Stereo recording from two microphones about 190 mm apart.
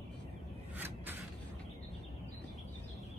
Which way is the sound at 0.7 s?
10° right (ahead or behind).